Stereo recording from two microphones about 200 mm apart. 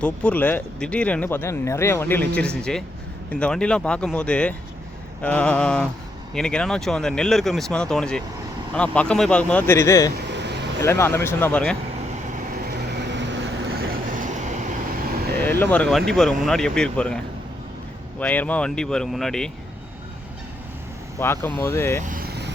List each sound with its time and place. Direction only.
0.0 s speech: 5° left (ahead or behind)
10.2 s a sound: 60° right (ahead or behind)
10.8 s speech: 15° left (ahead or behind)
13.0 s train: 65° right (ahead or behind); by 14.7 s 40° right (ahead or behind)
15.4 s speech: 10° left (ahead or behind)
18.2 s speech: 5° left (ahead or behind)
21.2 s speech: 15° left (ahead or behind)
22.0 s vehicle: 45° right (ahead or behind)